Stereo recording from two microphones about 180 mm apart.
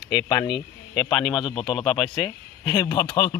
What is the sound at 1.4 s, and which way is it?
Speech, 25° left (ahead or behind).